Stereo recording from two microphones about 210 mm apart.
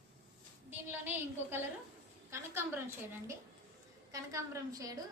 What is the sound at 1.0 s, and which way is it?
A woman's voice, 10° right (ahead or behind).